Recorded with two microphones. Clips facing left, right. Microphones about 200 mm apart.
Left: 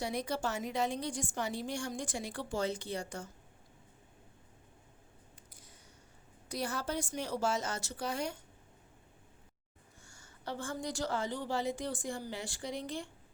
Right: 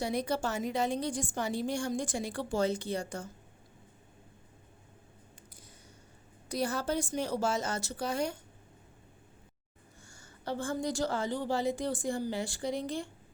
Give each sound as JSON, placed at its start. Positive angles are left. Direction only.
{"t": 0.0, "sound": "a woman's voice", "side_deg": -30}
{"t": 6.5, "sound": "a woman's voice", "side_deg": -30}
{"t": 10.4, "sound": "a woman's voice", "side_deg": -35}